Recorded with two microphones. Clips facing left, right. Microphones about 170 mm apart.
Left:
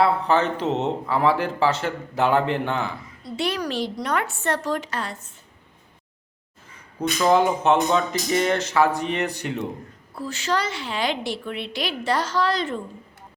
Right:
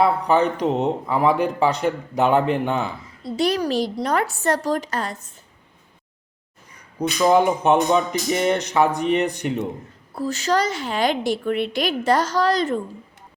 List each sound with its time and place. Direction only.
0.0 s speech: 15° right (ahead or behind)
3.3 s a woman's voice: 40° right (ahead or behind)
7.2 s speech: 15° right (ahead or behind)
10.2 s a woman's voice: 40° right (ahead or behind)